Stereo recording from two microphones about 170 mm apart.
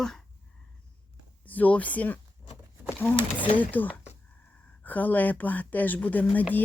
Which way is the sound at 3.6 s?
10° left (ahead or behind).